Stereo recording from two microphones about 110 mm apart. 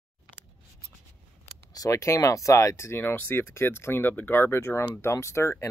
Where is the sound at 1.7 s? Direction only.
30° left (ahead or behind).